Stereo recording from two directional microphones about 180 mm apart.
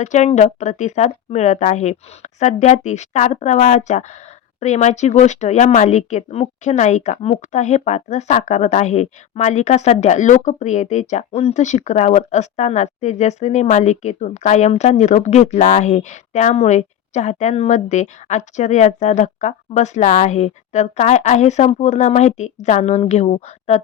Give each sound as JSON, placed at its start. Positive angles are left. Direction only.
{"t": 0.0, "sound": "speech", "side_deg": 40}